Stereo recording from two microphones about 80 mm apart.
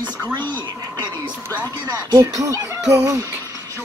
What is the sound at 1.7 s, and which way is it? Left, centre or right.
Speech, right.